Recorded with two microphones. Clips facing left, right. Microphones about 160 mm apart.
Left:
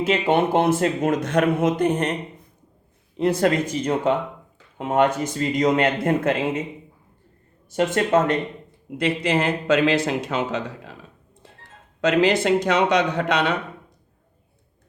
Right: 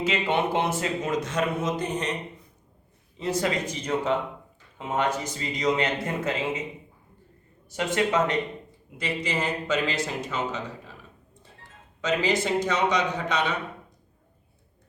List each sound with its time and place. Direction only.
0.0 s a man's voice: 50° left (ahead or behind)
3.2 s speech: 55° left (ahead or behind)
7.8 s a man's voice: 50° left (ahead or behind)
9.0 s speech: 60° left (ahead or behind)
11.9 s speech: 65° left (ahead or behind)